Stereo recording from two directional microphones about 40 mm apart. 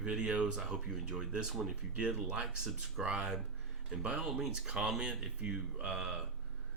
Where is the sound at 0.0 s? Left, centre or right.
Right.